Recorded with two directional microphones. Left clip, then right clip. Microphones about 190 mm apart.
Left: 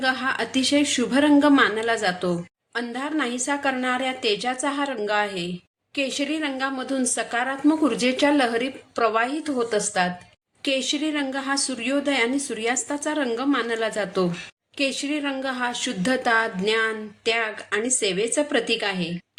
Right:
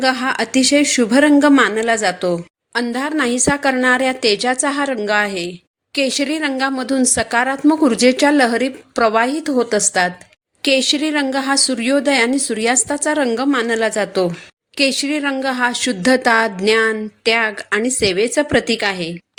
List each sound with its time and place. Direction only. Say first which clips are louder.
0.0 s a woman's voice: right 6 dB; 40° right (ahead or behind)